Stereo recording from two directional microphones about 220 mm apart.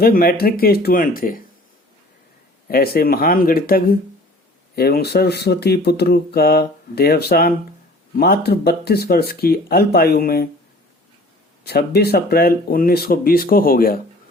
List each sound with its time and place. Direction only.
0.0 s speech: 40° left (ahead or behind)
2.6 s speech: 45° left (ahead or behind)
11.6 s speech: 45° left (ahead or behind)